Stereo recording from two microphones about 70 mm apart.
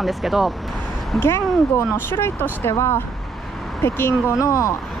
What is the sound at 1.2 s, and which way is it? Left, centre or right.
Speech, left.